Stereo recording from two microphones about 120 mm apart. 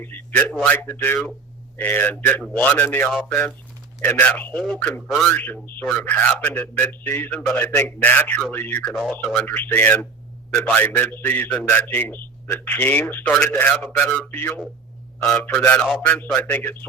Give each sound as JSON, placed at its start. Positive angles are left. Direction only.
{"t": 0.0, "sound": "a man's voice", "side_deg": 15}
{"t": 0.8, "sound": "a man's voice", "side_deg": 20}
{"t": 5.0, "sound": "speech", "side_deg": 0}
{"t": 5.3, "sound": "a man's voice", "side_deg": 15}